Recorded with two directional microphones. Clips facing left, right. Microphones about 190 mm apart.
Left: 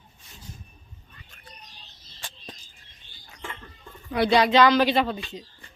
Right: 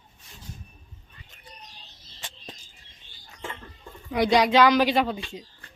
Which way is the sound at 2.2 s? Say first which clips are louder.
Even; 20° right (ahead or behind).